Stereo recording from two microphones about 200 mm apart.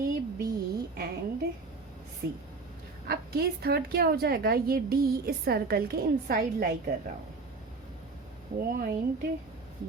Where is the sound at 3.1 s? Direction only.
50° right (ahead or behind).